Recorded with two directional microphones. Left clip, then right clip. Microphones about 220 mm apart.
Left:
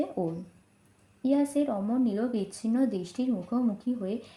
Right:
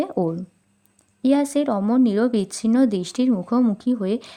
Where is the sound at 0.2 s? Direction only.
75° right (ahead or behind).